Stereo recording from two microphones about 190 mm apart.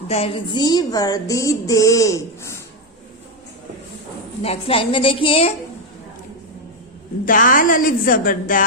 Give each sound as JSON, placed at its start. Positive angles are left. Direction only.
{"t": 0.1, "sound": "a sound", "side_deg": 30}
{"t": 4.4, "sound": "a woman's voice", "side_deg": 30}
{"t": 7.3, "sound": "speech", "side_deg": 45}